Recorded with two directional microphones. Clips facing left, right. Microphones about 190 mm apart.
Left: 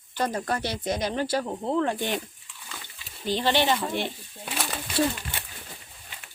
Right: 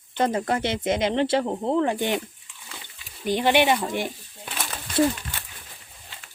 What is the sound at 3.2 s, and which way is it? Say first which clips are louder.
Speech: right 4 dB; 15° right (ahead or behind).